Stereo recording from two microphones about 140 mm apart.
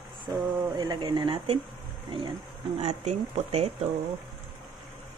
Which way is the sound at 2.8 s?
50° right (ahead or behind).